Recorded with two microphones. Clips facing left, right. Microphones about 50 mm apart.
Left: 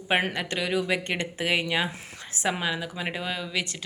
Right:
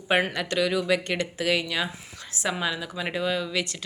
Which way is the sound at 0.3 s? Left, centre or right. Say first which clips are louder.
Right 2 dB; centre.